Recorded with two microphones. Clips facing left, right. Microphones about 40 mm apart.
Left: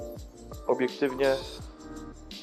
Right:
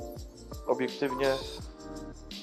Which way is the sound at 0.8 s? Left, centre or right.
Centre.